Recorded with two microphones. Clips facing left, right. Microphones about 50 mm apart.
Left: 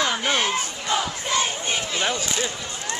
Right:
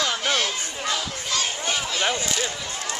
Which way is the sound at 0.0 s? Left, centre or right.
Left.